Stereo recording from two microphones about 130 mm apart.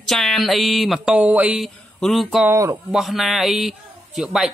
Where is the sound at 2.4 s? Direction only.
20° right (ahead or behind).